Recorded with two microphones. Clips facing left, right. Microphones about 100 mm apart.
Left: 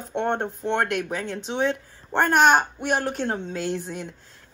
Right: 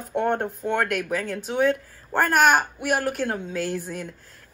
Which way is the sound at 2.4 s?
30° left (ahead or behind).